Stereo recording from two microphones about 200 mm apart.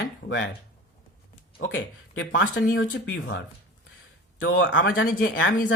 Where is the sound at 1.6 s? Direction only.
65° left (ahead or behind).